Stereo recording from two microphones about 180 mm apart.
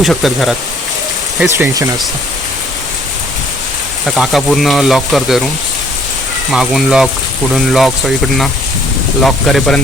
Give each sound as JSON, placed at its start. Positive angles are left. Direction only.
{"t": 0.0, "sound": "speech", "side_deg": 0}
{"t": 1.5, "sound": "speech", "side_deg": -15}
{"t": 4.0, "sound": "speech", "side_deg": 0}
{"t": 6.5, "sound": "speech", "side_deg": 0}